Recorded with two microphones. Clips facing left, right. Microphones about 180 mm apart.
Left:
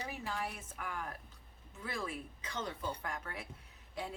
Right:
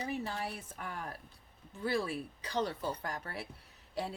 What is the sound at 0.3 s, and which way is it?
Speech, 30° right (ahead or behind).